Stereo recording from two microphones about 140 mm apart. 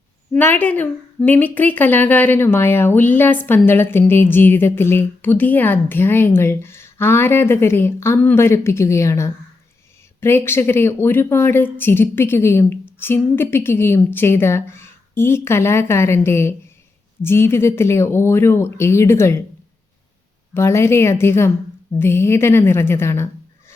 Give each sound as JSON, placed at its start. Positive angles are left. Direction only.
{"t": 0.3, "sound": "a woman's voice", "side_deg": 15}
{"t": 20.5, "sound": "a woman's voice", "side_deg": 20}